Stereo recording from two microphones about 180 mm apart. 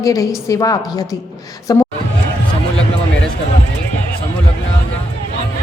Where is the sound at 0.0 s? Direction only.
20° left (ahead or behind).